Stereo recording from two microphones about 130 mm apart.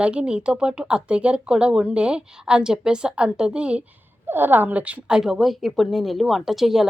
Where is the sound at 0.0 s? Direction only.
10° right (ahead or behind).